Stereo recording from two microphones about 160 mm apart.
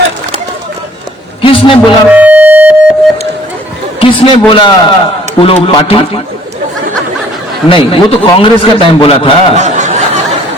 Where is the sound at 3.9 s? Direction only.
35° left (ahead or behind).